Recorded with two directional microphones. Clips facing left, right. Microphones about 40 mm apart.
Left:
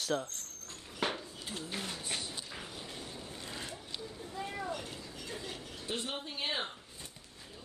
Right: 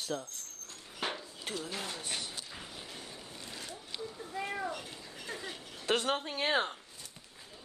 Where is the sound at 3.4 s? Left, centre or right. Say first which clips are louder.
Left 1 dB; left.